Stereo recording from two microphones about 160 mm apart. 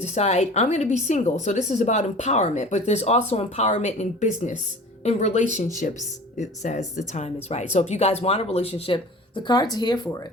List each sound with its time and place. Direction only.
0.0 s a woman's voice: 45° left (ahead or behind); by 10.2 s 25° left (ahead or behind)